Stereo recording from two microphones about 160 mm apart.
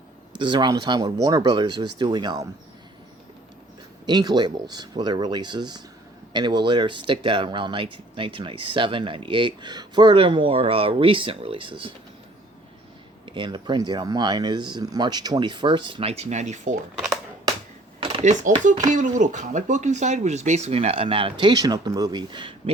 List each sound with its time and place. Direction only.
0.3 s speech: 30° right (ahead or behind)
4.0 s speech: 25° right (ahead or behind)
13.2 s speech: 30° right (ahead or behind); by 16.7 s 45° right (ahead or behind)
18.0 s speech: 40° right (ahead or behind)